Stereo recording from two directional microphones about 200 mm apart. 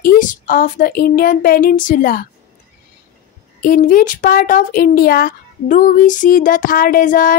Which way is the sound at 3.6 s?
45° left (ahead or behind).